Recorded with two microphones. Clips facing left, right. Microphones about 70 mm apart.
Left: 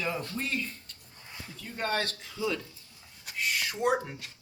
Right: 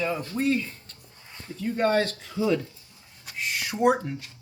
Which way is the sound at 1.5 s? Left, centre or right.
Right.